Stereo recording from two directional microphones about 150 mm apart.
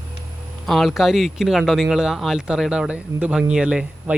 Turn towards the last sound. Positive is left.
turn(degrees=-5)  # may be behind; listen again after turning